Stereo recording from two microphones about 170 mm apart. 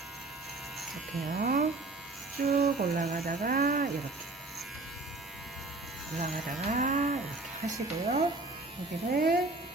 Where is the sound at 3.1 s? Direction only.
55° right (ahead or behind).